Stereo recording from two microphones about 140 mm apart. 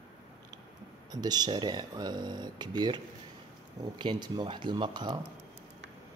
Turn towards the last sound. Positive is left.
turn(degrees=-30)  # may be behind; listen again after turning